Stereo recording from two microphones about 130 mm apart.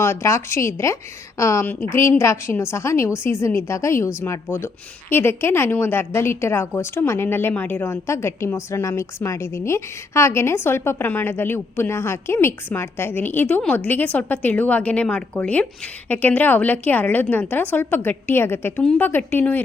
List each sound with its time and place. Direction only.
0.0 s a woman's voice: 20° left (ahead or behind)